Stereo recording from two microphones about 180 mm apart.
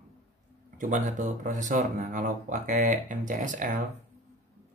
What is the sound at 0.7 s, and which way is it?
Speech, 45° right (ahead or behind).